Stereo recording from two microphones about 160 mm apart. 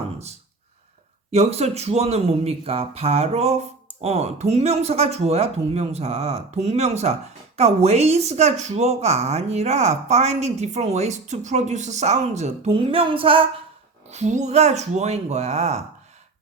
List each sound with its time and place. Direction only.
1.3 s speech: 40° right (ahead or behind)
14.1 s speech: 45° right (ahead or behind)